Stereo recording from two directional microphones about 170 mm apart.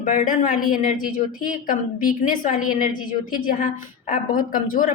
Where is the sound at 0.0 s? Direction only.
55° left (ahead or behind).